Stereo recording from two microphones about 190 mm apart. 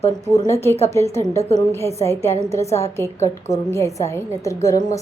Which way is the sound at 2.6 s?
35° left (ahead or behind).